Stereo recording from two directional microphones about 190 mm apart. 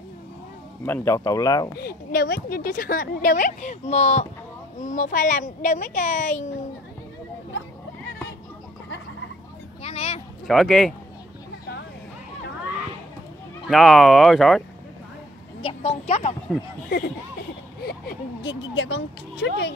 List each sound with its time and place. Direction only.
0.8 s speech: 15° left (ahead or behind)
1.8 s speech: 55° left (ahead or behind); by 6.4 s 40° left (ahead or behind)
9.8 s a sound: 35° left (ahead or behind)
10.4 s speech: centre (ahead or behind)
13.7 s speech: centre (ahead or behind)
15.6 s speech: 35° left (ahead or behind)
17.8 s speech: 60° left (ahead or behind)